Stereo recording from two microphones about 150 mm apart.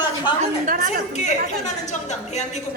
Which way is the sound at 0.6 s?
70° right (ahead or behind).